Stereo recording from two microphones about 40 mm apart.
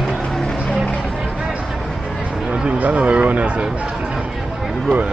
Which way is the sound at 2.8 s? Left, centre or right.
Right.